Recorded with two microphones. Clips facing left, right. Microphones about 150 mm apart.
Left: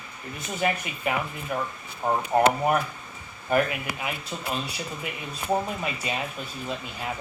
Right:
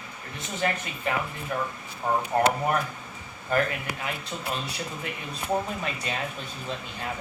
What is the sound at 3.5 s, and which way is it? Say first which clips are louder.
Speech: left 2 dB; 10° left (ahead or behind).